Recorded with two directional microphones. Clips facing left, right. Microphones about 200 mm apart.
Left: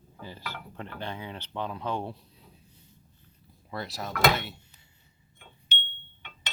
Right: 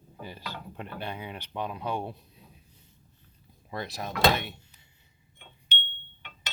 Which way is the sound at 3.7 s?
20° right (ahead or behind).